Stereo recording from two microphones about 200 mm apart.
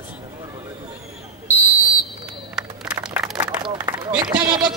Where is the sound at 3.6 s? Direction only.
25° right (ahead or behind).